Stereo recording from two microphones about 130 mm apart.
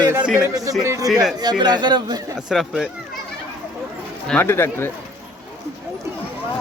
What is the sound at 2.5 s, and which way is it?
Speech, 5° right (ahead or behind).